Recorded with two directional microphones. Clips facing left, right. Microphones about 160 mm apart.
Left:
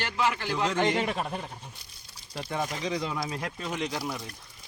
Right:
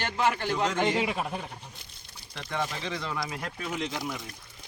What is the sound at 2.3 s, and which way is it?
Speech, 30° left (ahead or behind).